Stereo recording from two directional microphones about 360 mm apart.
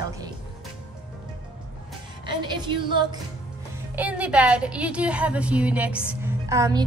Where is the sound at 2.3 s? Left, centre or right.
Centre.